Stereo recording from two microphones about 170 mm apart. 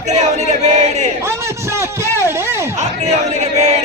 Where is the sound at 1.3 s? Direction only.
15° right (ahead or behind).